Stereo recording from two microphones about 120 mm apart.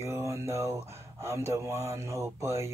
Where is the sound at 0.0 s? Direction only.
25° right (ahead or behind).